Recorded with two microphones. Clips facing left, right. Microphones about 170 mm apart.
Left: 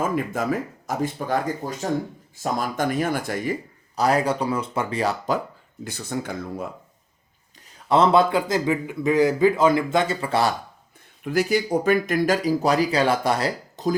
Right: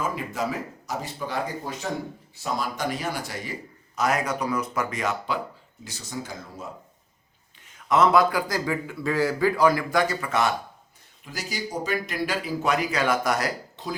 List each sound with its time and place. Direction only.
0.0 s speech: 50° left (ahead or behind)
3.9 s speech: 35° left (ahead or behind)
5.8 s speech: 55° left (ahead or behind)
7.9 s a man's voice: 30° left (ahead or behind)
11.2 s speech: 60° left (ahead or behind); by 13.5 s 30° left (ahead or behind)
13.8 s a sound: 40° left (ahead or behind)